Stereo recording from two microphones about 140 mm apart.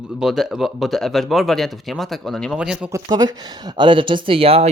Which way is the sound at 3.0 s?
30° right (ahead or behind).